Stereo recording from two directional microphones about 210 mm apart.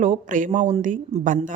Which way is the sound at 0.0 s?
35° right (ahead or behind).